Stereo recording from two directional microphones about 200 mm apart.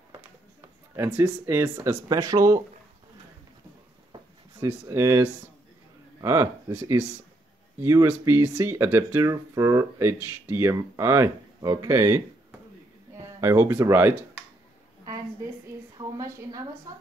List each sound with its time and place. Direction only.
0.6 s speech: 15° right (ahead or behind)
4.1 s a sound: 20° right (ahead or behind)
6.2 s speech: 15° right (ahead or behind)
13.2 s speech: 15° right (ahead or behind)
16.0 s speech: 15° right (ahead or behind)